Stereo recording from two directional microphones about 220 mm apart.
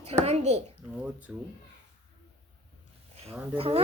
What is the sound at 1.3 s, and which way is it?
Speech, 5° right (ahead or behind).